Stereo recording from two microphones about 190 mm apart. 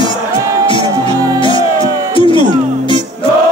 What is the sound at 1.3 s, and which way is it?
Music, 25° left (ahead or behind).